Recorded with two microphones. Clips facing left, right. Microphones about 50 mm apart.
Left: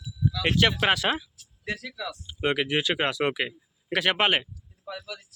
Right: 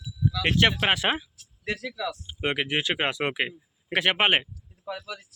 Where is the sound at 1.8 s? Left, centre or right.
Right.